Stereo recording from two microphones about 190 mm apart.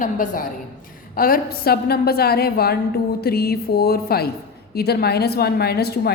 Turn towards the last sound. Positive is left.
turn(degrees=55)  # may be behind; listen again after turning